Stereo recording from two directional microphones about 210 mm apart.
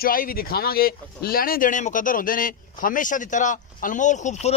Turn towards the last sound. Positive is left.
turn(degrees=35)  # may be behind; listen again after turning